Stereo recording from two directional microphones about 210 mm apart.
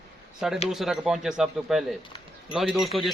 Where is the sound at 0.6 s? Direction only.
Centre (ahead or behind).